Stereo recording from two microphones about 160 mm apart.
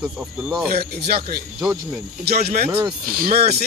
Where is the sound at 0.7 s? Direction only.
75° right (ahead or behind).